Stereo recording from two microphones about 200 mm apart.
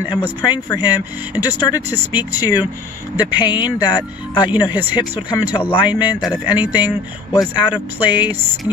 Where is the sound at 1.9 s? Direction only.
10° right (ahead or behind).